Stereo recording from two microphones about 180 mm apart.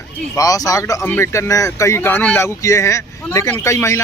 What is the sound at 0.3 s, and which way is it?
Speech, 20° left (ahead or behind).